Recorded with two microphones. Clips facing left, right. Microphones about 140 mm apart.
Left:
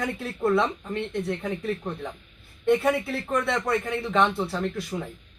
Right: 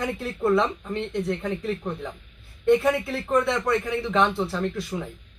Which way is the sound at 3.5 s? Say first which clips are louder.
Right 2 dB; centre (ahead or behind).